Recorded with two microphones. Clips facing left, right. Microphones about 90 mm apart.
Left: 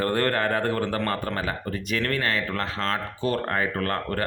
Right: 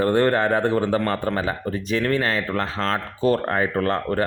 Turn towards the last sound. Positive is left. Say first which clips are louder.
# right 5 dB
turn(degrees=-25)  # may be behind; listen again after turning